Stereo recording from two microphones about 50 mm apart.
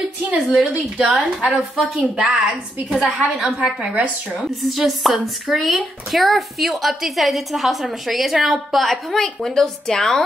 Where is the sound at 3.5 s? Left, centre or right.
Right.